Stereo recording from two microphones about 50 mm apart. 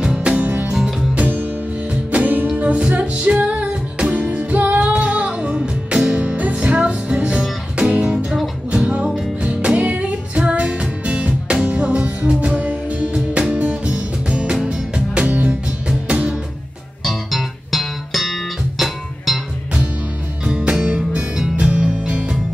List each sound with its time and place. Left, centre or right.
0.0 s music: centre
8.3 s music: centre
8.8 s music: right
15.2 s music: right
17.0 s music: centre
20.7 s music: centre